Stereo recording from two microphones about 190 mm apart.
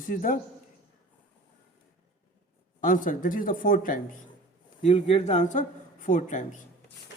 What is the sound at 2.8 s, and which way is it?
Speech, 45° left (ahead or behind).